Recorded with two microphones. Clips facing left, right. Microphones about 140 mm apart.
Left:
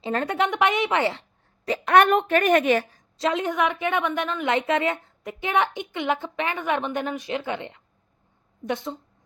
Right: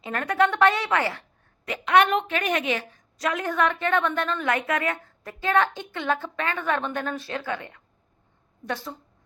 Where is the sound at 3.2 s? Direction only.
25° left (ahead or behind).